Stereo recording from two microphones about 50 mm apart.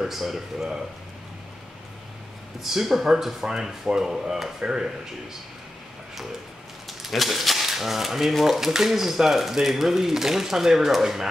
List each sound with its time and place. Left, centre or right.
0.0 s speech: centre
2.6 s speech: centre
6.9 s speech: centre